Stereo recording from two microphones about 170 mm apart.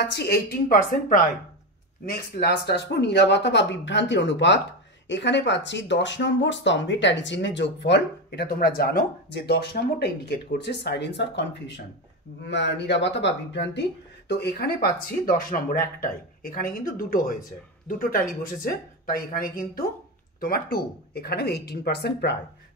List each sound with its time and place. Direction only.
0.0 s speech: 75° left (ahead or behind)
2.0 s speech: 75° left (ahead or behind)